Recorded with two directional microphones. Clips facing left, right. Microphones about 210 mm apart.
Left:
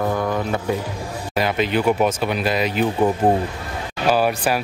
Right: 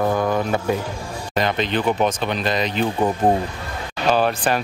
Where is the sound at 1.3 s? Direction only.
10° left (ahead or behind).